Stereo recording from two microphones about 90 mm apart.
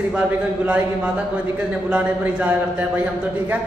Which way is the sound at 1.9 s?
15° right (ahead or behind).